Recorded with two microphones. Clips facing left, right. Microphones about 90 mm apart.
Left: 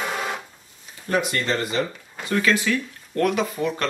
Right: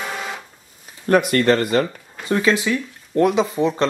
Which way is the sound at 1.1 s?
55° right (ahead or behind).